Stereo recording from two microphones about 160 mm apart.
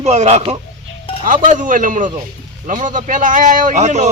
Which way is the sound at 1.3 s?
55° right (ahead or behind).